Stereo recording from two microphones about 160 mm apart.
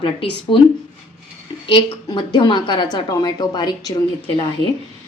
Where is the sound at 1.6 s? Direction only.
30° left (ahead or behind).